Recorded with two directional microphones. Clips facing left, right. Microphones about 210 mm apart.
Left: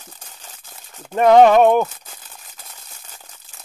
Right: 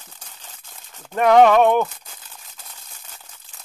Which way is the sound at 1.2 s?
25° left (ahead or behind).